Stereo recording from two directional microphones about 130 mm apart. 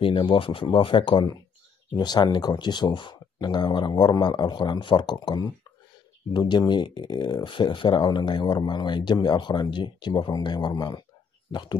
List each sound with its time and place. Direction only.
0.0 s speech: 35° left (ahead or behind)